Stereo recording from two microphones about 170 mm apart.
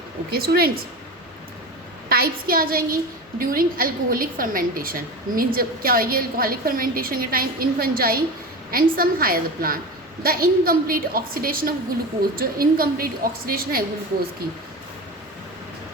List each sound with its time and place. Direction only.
0.3 s a woman's voice: 65° right (ahead or behind)
2.0 s a woman's voice: 60° right (ahead or behind)